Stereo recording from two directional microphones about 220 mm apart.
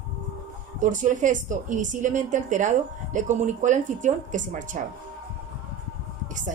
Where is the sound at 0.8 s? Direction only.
35° right (ahead or behind).